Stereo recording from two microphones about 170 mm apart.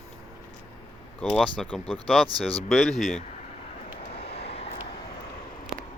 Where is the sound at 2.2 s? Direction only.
25° right (ahead or behind).